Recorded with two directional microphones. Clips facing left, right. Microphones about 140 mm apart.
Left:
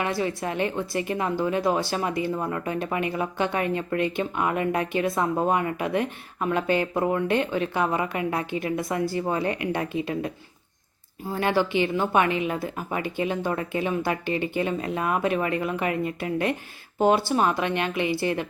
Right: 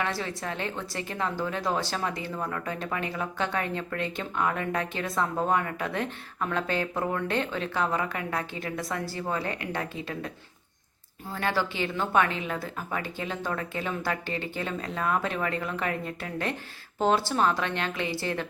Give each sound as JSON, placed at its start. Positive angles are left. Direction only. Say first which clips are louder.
{"t": 0.0, "sound": "a woman's voice", "louder": "left 5 dB", "side_deg": 15}